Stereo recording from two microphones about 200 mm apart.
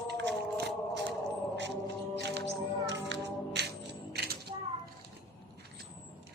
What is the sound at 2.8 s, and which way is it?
Music, 60° right (ahead or behind).